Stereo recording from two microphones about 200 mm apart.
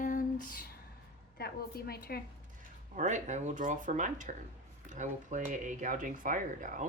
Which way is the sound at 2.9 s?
40° right (ahead or behind).